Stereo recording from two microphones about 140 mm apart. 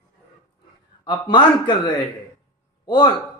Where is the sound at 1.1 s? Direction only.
35° left (ahead or behind).